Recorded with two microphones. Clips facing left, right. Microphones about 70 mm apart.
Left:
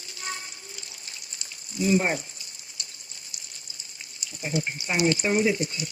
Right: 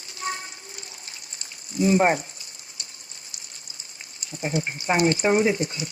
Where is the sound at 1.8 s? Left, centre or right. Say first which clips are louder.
Right 4 dB; right.